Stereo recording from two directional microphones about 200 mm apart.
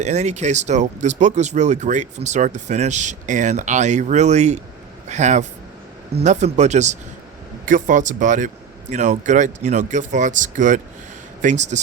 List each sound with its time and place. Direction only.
0.0 s speech: 35° right (ahead or behind)